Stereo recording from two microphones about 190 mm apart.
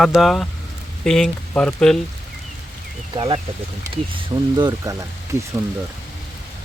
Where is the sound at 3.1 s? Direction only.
30° right (ahead or behind).